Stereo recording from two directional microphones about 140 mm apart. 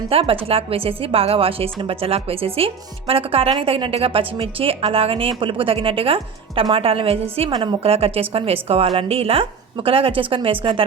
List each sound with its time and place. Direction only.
0.1 s a woman's voice: 40° right (ahead or behind)